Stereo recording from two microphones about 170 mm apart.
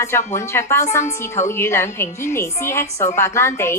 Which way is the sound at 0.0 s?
15° left (ahead or behind).